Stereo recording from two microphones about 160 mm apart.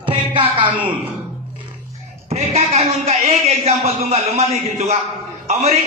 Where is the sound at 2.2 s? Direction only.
40° right (ahead or behind).